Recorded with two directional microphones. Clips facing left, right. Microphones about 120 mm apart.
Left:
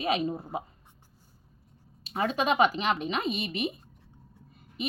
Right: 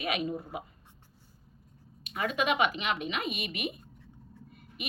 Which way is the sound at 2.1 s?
30° left (ahead or behind).